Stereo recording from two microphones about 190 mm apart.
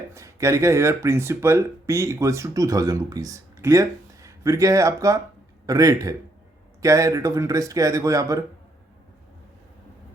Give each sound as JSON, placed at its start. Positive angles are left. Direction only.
{"t": 0.1, "sound": "speech", "side_deg": -15}